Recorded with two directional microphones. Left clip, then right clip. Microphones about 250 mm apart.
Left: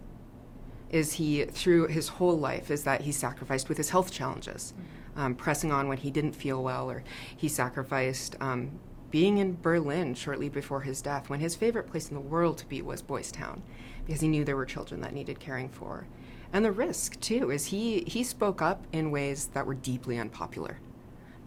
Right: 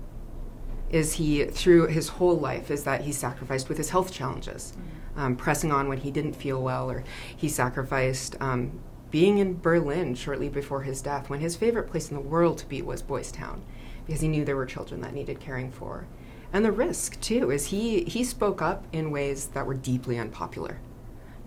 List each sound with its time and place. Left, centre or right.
0.9 s speech: centre